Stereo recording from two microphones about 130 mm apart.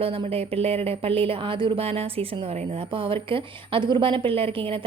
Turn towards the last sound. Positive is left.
turn(degrees=-45)  # may be behind; listen again after turning